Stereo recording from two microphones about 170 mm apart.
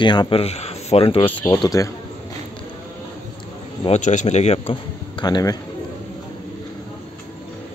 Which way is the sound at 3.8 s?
45° left (ahead or behind).